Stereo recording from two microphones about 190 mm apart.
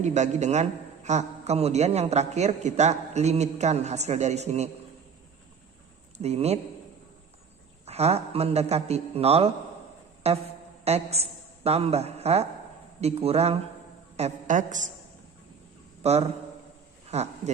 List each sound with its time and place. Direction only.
0.0 s a man's voice: 35° right (ahead or behind)
6.1 s a man's voice: 35° right (ahead or behind)
7.9 s a man's voice: 35° right (ahead or behind)
16.0 s a man's voice: 35° right (ahead or behind)